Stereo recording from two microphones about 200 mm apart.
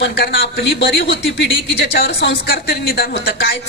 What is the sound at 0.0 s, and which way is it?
A man's voice, 55° left (ahead or behind).